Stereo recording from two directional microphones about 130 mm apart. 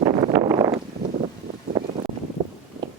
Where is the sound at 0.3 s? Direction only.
30° right (ahead or behind).